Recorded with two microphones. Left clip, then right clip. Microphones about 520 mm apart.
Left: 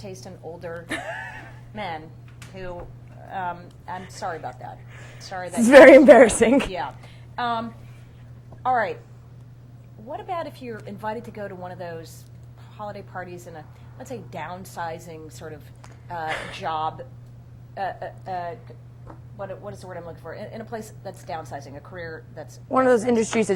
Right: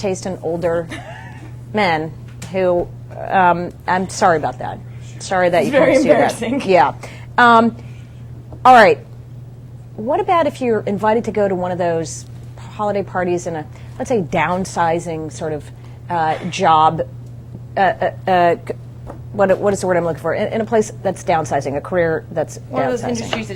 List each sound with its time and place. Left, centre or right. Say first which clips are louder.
0.0 s a woman's voice: right 17 dB; right
0.9 s a woman's voice: left 1 dB; left
1.7 s speech: right 16 dB; right
3.2 s speech: right 17 dB; right
5.7 s a woman's voice: left 7 dB; left
6.7 s speech: right 18 dB; right
10.1 s a woman's voice: right 15 dB; right
22.7 s a woman's voice: left 2 dB; left